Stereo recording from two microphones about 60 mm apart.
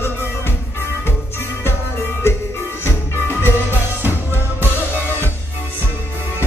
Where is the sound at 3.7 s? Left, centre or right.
Right.